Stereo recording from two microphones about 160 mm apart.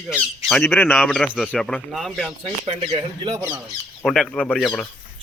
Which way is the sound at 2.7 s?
30° right (ahead or behind).